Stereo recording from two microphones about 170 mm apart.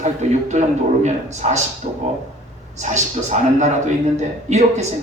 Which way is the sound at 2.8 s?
45° right (ahead or behind).